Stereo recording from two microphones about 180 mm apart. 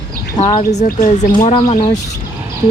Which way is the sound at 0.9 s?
45° left (ahead or behind).